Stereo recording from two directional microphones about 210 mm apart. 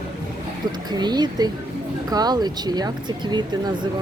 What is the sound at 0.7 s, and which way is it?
Speech, 20° right (ahead or behind).